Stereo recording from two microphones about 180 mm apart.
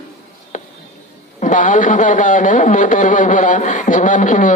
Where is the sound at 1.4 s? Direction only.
45° left (ahead or behind).